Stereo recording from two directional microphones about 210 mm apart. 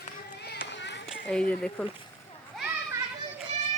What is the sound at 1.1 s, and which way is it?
Speech, 5° left (ahead or behind).